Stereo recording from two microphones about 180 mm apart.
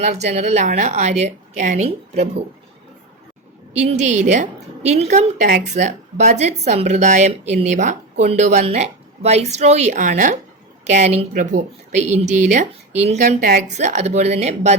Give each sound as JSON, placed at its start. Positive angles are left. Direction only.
{"t": 0.0, "sound": "a woman's voice", "side_deg": -40}
{"t": 3.8, "sound": "a woman's voice", "side_deg": -40}